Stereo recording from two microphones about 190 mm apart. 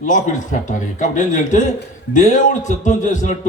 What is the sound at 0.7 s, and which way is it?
A man's voice, 40° left (ahead or behind).